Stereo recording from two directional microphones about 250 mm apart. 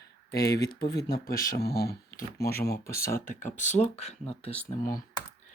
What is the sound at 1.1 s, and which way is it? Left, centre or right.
Speech, left.